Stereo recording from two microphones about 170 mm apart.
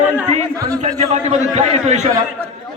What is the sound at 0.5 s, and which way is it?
Speech, 20° right (ahead or behind).